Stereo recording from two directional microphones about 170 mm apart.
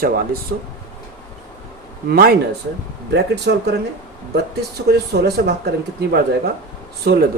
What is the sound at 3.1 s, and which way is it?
Speech, 80° right.